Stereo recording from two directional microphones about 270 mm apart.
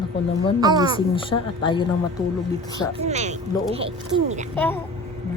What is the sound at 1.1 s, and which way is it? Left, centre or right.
Speech, centre.